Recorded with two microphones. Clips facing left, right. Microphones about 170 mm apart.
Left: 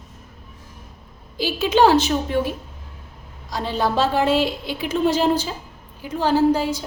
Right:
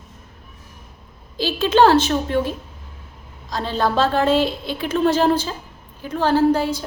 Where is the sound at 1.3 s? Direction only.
15° left (ahead or behind).